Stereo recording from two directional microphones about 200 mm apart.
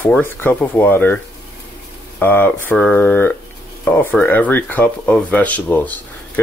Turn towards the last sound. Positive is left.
turn(degrees=10)  # may be behind; listen again after turning